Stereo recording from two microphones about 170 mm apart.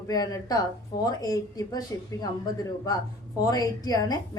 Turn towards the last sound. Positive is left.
turn(degrees=20)  # may be behind; listen again after turning